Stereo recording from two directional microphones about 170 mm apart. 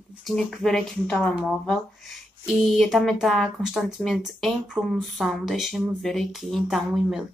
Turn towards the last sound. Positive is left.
turn(degrees=0)  # may be behind; listen again after turning